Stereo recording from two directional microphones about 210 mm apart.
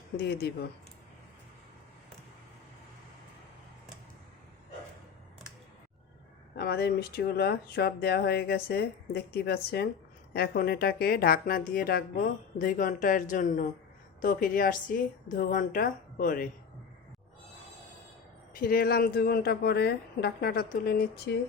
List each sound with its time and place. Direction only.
0.2 s speech: 50° left (ahead or behind)
6.6 s a woman's voice: 50° left (ahead or behind)
18.5 s speech: 45° left (ahead or behind)